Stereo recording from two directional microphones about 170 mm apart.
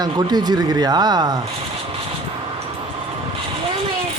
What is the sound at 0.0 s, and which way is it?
Speech, 25° right (ahead or behind).